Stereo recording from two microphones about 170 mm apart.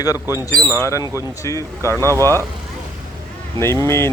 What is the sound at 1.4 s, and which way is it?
Speech, 20° left (ahead or behind).